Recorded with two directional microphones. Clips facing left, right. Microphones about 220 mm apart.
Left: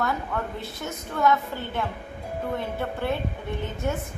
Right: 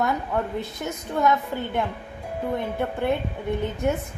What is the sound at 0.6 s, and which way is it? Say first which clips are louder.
A woman's voice: right 3 dB; 20° right (ahead or behind).